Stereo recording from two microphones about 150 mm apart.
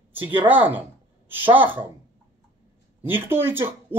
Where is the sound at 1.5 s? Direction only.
10° right (ahead or behind).